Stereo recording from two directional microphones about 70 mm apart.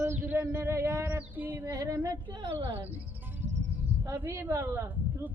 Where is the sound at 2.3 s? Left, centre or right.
Right.